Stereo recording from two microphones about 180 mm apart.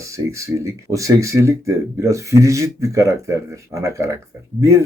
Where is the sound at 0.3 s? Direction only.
15° right (ahead or behind).